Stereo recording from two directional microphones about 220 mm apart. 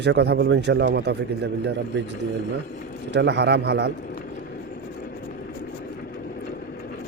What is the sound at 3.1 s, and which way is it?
Speech, 50° right (ahead or behind).